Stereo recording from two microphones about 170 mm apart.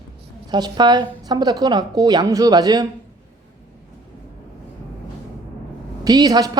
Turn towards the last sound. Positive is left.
turn(degrees=-25)  # may be behind; listen again after turning